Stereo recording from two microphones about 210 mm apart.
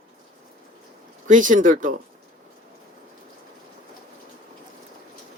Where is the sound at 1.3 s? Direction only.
40° right (ahead or behind).